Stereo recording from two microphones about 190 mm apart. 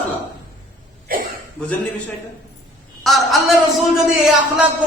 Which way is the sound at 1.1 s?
50° right (ahead or behind).